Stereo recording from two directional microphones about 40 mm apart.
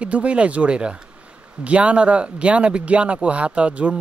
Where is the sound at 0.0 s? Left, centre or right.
Right.